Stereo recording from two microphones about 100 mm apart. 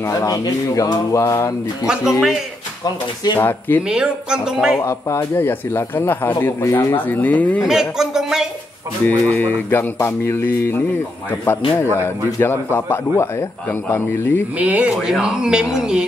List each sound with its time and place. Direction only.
0.0 s a sound: 35° left (ahead or behind)
1.9 s speech: 5° right (ahead or behind)
3.3 s speech: 20° left (ahead or behind)
3.9 s speech: 10° right (ahead or behind)
4.7 s speech: 25° left (ahead or behind)
6.7 s a sound: 35° left (ahead or behind)
7.1 s speech: 15° left (ahead or behind)
7.6 s speech: 5° right (ahead or behind)
9.0 s speech: 15° left (ahead or behind)
14.6 s speech: 15° right (ahead or behind)